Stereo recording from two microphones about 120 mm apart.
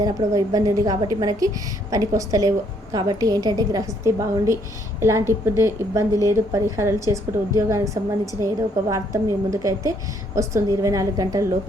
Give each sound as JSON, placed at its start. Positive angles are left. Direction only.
{"t": 0.0, "sound": "a woman's voice", "side_deg": -30}